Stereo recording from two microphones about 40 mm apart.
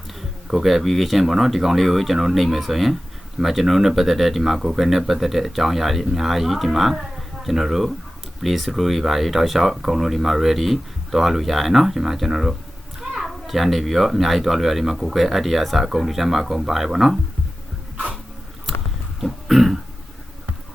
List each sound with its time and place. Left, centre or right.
0.5 s speech: centre
19.2 s throat clearing: centre